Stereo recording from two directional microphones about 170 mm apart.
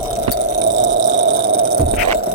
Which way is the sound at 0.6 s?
90° right.